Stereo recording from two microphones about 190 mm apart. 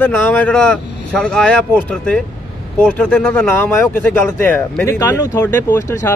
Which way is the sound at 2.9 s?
5° left (ahead or behind).